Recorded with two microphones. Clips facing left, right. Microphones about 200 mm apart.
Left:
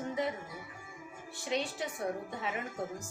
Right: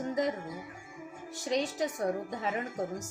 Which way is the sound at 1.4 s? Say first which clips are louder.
Right 4 dB; 40° right (ahead or behind).